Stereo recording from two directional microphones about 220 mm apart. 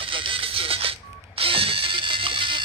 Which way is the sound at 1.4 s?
25° right (ahead or behind).